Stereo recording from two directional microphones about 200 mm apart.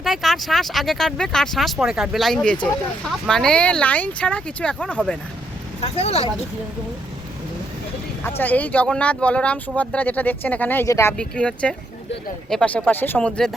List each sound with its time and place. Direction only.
0.0 s speech: centre (ahead or behind)
6.0 s speech: 30° left (ahead or behind)
8.4 s speech: 10° left (ahead or behind)